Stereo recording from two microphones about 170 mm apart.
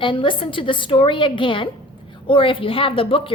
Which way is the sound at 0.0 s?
30° left (ahead or behind).